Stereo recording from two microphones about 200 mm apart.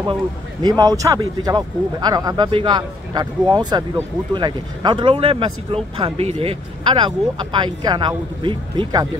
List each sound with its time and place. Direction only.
0.0 s speech: 20° right (ahead or behind)